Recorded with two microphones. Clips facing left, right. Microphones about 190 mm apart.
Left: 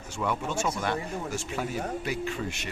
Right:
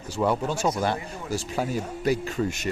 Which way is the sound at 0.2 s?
35° right (ahead or behind).